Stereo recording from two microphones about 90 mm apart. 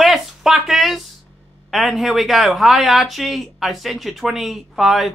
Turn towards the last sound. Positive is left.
turn(degrees=0)  # may be behind; listen again after turning